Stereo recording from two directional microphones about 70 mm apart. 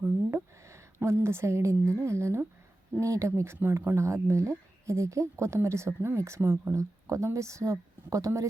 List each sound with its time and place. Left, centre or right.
0.0 s a woman's voice: right